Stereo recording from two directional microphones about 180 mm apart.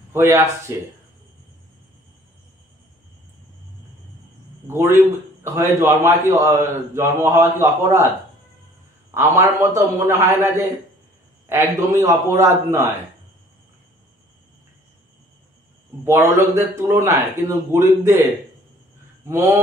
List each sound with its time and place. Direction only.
0.1 s a man's voice: 15° right (ahead or behind)
4.6 s a man's voice: 15° right (ahead or behind)
9.1 s a man's voice: 15° right (ahead or behind)
16.0 s a man's voice: 15° right (ahead or behind)
19.2 s a sound: 10° right (ahead or behind)